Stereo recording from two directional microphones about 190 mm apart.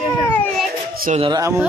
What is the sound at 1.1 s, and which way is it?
Speech, 20° right (ahead or behind).